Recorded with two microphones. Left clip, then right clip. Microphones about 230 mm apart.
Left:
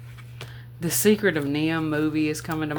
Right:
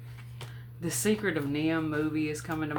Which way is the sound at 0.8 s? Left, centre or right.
Left.